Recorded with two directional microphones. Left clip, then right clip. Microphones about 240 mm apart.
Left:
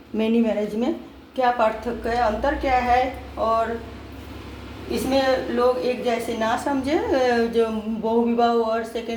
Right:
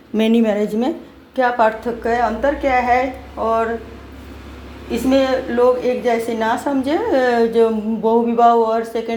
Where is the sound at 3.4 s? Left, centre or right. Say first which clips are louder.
Right 3 dB; right.